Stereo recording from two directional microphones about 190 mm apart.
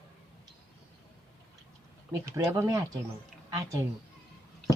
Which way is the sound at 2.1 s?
15° right (ahead or behind).